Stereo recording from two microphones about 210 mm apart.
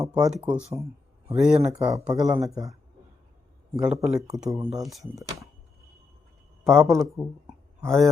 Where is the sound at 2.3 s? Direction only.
15° right (ahead or behind).